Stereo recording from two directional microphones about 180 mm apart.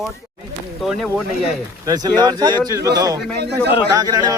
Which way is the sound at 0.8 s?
Centre (ahead or behind).